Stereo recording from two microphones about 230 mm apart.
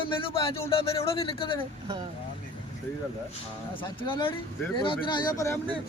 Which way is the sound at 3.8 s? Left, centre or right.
Left.